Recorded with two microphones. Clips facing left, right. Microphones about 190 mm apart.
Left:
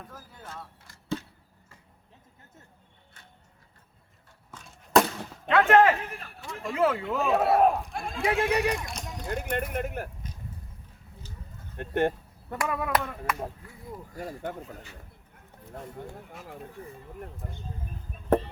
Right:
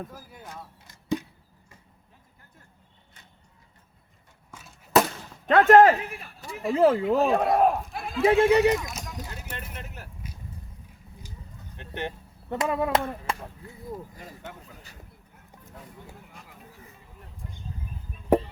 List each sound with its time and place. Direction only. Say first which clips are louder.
0.1 s arrow: right 1 dB; 10° right (ahead or behind)
4.5 s a sound: even; 5° right (ahead or behind)
5.5 s speech: right 4 dB; 40° right (ahead or behind)
6.5 s speech: right 6 dB; 10° right (ahead or behind)
6.7 s speech: right 5 dB; 35° right (ahead or behind)
7.2 s speech: right 1 dB; 5° left (ahead or behind)
8.2 s speech: right 7 dB; 30° right (ahead or behind)
9.3 s speech: left 10 dB; 55° left (ahead or behind)
11.8 s speech: left 8 dB; 50° left (ahead or behind)
12.5 s speech: right 3 dB; 25° right (ahead or behind)
14.2 s speech: left 7 dB; 45° left (ahead or behind)
16.0 s speech: left 5 dB; centre (ahead or behind)
17.4 s speech: left 3 dB; 45° left (ahead or behind)
18.3 s music: right 2 dB; 10° right (ahead or behind)